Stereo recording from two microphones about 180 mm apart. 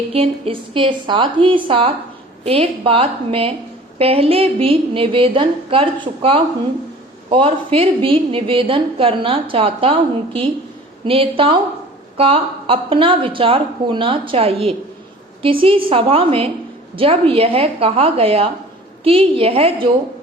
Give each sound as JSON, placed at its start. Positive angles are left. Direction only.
{"t": 0.1, "sound": "a woman's voice", "side_deg": -35}